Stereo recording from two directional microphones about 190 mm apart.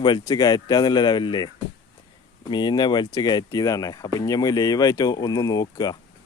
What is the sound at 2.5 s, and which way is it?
Speech, 25° left (ahead or behind).